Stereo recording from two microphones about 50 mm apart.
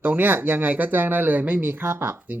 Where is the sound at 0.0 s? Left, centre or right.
Right.